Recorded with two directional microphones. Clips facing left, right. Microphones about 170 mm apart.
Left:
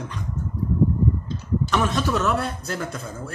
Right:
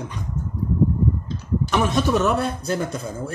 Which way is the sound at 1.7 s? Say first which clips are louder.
Right 4 dB; 15° right (ahead or behind).